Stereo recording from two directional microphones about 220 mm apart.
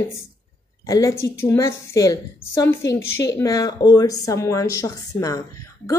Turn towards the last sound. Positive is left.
turn(degrees=15)  # may be behind; listen again after turning